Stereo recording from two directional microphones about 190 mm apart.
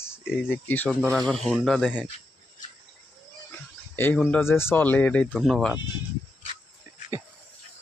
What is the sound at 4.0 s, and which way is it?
Speech, 10° left (ahead or behind).